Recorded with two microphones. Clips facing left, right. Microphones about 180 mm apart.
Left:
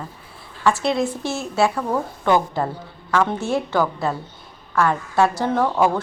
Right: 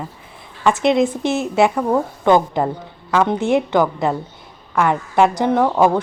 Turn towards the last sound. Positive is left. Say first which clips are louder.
# right 4 dB
turn(degrees=-15)  # may be behind; listen again after turning